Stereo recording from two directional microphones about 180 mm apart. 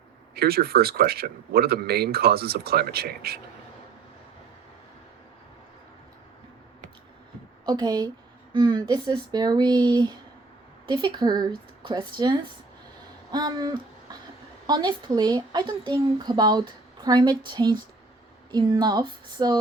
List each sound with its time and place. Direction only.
0.3 s speech: 60° right (ahead or behind)
7.6 s speech: 20° right (ahead or behind)
14.7 s speech: 25° right (ahead or behind)